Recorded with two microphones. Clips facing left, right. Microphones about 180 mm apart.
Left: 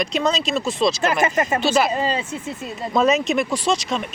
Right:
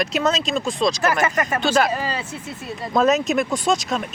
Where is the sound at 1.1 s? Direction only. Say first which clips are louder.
Left 1 dB; 25° left (ahead or behind).